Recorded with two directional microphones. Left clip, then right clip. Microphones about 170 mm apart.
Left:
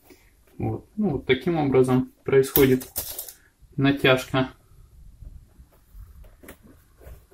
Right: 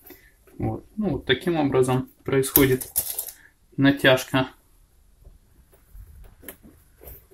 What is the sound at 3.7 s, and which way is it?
Speech, 40° right (ahead or behind).